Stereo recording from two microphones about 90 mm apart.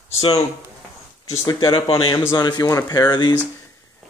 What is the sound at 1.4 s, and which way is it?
Speech, 60° left (ahead or behind).